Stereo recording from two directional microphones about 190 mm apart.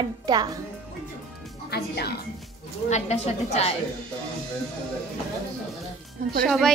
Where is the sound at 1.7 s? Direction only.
60° left (ahead or behind).